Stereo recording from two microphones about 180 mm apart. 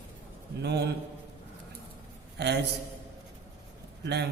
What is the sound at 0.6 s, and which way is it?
Speech, 65° right (ahead or behind).